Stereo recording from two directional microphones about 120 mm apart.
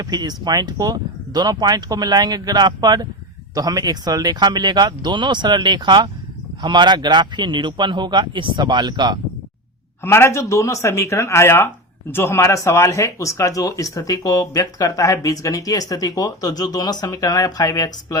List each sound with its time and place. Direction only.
0.0 s speech: 35° right (ahead or behind)
10.0 s speech: 20° left (ahead or behind)